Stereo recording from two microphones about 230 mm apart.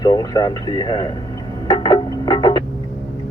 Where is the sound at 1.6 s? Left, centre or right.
Centre.